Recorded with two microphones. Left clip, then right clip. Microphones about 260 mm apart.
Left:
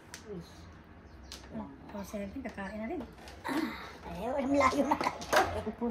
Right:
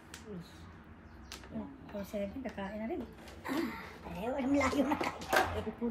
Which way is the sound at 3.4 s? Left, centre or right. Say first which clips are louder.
Left 2 dB; centre.